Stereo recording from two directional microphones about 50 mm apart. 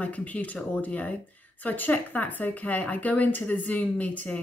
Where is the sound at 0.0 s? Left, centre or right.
Left.